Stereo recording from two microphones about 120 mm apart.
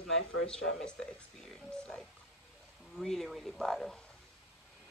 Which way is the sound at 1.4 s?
5° left (ahead or behind).